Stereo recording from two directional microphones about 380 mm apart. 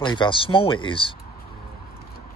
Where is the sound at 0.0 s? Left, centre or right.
Centre.